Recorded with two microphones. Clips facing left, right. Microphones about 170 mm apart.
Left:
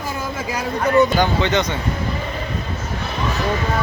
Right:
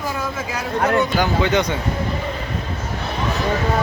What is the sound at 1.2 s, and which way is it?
Speech, 10° right (ahead or behind).